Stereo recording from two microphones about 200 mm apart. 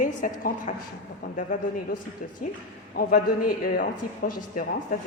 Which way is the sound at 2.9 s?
45° left (ahead or behind).